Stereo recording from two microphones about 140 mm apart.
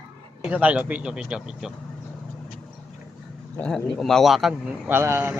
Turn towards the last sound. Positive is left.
turn(degrees=-15)  # may be behind; listen again after turning